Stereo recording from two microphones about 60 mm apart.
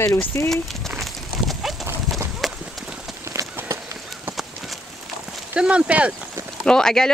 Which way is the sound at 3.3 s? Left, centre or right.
Right.